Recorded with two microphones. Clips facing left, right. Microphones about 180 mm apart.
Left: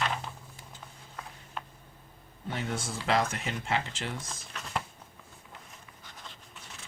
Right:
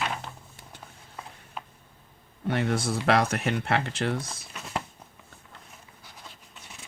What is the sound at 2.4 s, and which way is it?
Speech, 70° right (ahead or behind).